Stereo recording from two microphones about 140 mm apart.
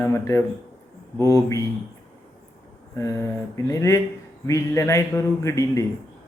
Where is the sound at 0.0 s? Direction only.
20° left (ahead or behind).